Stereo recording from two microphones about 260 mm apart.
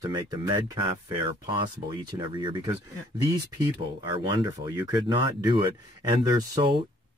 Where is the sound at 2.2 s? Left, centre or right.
Centre.